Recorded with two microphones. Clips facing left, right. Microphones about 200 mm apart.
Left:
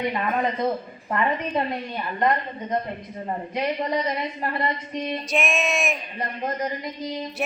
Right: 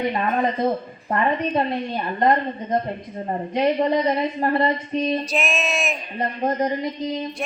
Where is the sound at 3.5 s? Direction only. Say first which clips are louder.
Right 7 dB; 30° right (ahead or behind).